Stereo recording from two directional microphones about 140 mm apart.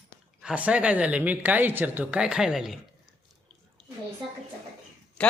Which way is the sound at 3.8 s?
5° left (ahead or behind).